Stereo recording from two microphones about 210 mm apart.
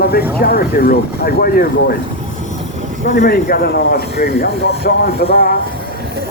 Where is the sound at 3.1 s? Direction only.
50° left (ahead or behind).